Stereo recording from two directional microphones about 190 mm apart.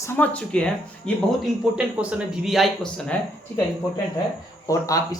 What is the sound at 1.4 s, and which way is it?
A man's voice, 5° right (ahead or behind).